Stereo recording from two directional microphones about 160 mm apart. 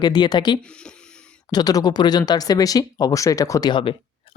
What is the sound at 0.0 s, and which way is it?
A man's voice, 25° left (ahead or behind).